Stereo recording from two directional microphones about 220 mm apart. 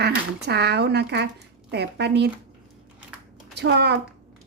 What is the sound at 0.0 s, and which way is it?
A woman's voice, 50° right (ahead or behind).